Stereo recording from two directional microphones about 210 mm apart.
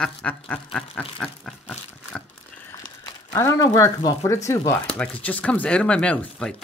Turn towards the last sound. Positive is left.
turn(degrees=5)  # may be behind; listen again after turning